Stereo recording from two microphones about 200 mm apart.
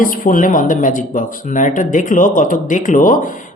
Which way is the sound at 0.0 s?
40° left (ahead or behind).